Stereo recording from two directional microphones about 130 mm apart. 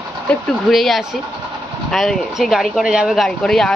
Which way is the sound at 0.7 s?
Centre (ahead or behind).